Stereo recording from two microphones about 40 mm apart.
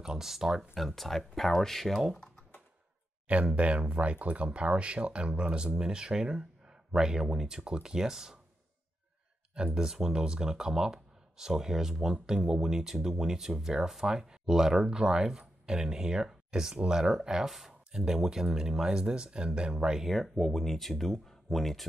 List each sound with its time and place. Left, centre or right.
0.0 s speech: centre
0.7 s speech: centre
2.1 s typing: centre
3.3 s speech: right; by 8.4 s centre
9.8 s speech: centre
17.5 s speech: centre; by 20.0 s right
20.0 s speech: centre